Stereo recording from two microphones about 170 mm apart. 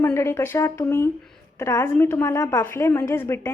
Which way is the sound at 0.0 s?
15° left (ahead or behind).